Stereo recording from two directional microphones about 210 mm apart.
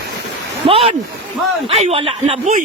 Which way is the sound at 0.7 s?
30° right (ahead or behind).